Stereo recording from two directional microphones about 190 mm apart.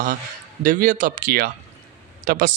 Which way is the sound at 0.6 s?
45° right (ahead or behind).